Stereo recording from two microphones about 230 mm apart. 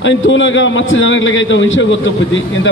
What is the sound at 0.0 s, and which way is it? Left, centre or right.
A man's voice, left.